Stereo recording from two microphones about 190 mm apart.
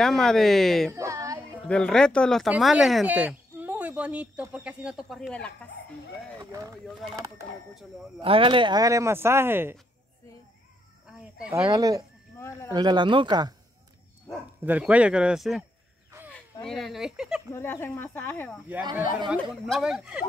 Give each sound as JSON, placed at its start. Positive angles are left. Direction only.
{"t": 0.0, "sound": "speech", "side_deg": 5}
{"t": 0.9, "sound": "a sound", "side_deg": -15}
{"t": 1.7, "sound": "speech", "side_deg": 5}
{"t": 6.4, "sound": "speech", "side_deg": -20}
{"t": 8.2, "sound": "speech", "side_deg": -30}
{"t": 11.1, "sound": "a sound", "side_deg": -5}
{"t": 11.5, "sound": "speech", "side_deg": -20}
{"t": 12.4, "sound": "speech", "side_deg": 15}
{"t": 12.7, "sound": "speech", "side_deg": -25}
{"t": 14.6, "sound": "speech", "side_deg": -10}
{"t": 16.6, "sound": "speech", "side_deg": 0}
{"t": 17.6, "sound": "speech", "side_deg": 10}
{"t": 19.5, "sound": "speech", "side_deg": 0}